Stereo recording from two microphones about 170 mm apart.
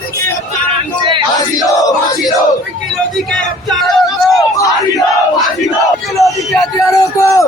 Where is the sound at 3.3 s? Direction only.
Centre (ahead or behind).